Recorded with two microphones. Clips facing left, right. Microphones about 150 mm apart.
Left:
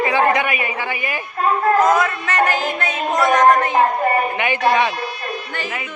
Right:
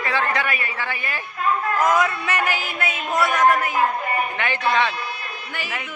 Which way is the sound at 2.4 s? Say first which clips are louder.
Left 6 dB; 50° left (ahead or behind).